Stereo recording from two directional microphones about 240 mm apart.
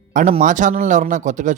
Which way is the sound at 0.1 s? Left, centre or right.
Right.